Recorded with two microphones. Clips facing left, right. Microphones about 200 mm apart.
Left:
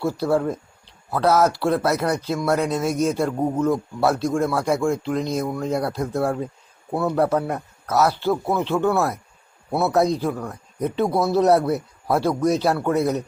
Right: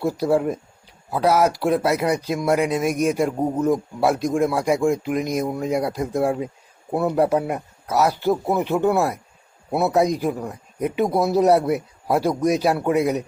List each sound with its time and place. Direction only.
0.0 s speech: 15° right (ahead or behind)